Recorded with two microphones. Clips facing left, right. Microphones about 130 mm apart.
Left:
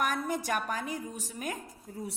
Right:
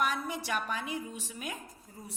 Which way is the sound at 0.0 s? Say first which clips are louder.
Left 2 dB; 45° left (ahead or behind).